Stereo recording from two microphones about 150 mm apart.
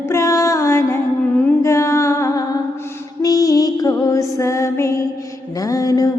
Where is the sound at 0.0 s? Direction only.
20° left (ahead or behind).